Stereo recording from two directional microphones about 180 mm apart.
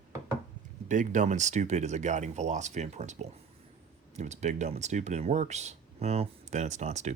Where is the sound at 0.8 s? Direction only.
45° right (ahead or behind).